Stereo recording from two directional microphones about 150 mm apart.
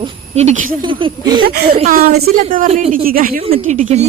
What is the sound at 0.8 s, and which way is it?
Speech, 35° right (ahead or behind).